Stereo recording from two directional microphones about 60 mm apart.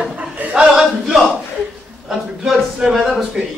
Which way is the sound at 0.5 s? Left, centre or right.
Centre.